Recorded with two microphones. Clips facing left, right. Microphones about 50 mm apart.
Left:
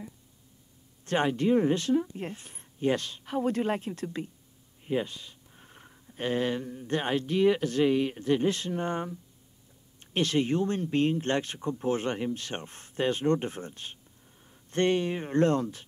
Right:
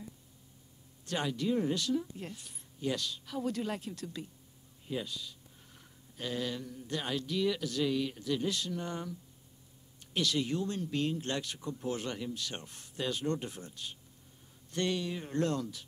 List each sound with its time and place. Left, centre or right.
1.0 s speech: left